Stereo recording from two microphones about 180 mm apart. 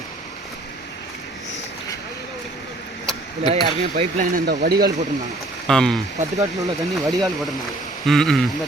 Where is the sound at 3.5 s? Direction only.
40° right (ahead or behind); by 4.9 s 60° right (ahead or behind).